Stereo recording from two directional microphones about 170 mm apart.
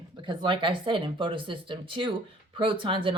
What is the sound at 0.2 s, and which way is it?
Speech, 30° right (ahead or behind).